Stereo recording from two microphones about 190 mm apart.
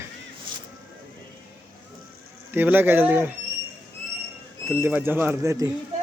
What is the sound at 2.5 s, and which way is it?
Speech, 10° right (ahead or behind).